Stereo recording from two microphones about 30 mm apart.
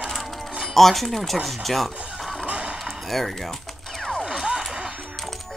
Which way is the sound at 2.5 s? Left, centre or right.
Right.